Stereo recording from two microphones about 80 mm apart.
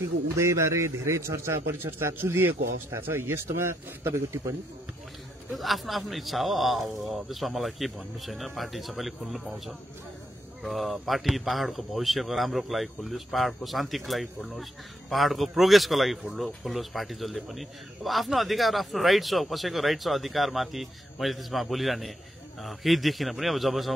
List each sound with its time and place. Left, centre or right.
0.3 s a man's voice: right
5.5 s speech: centre